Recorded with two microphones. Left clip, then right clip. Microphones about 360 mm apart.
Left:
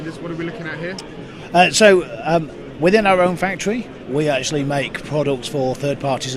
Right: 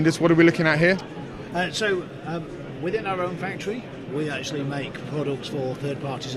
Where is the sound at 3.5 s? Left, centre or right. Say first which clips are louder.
Left 7 dB; left.